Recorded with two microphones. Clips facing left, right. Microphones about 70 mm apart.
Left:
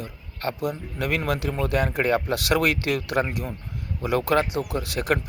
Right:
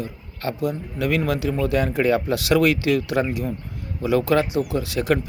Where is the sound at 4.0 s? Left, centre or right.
Left.